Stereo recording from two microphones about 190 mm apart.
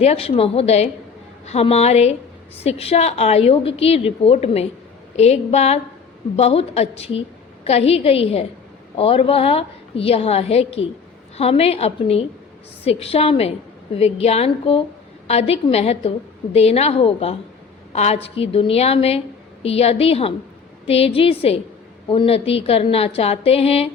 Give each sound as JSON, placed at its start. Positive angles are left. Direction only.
{"t": 0.0, "sound": "a woman's voice", "side_deg": 35}